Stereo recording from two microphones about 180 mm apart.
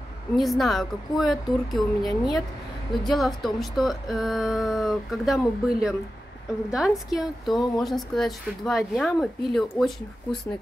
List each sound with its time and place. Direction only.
0.4 s a woman's voice: centre (ahead or behind)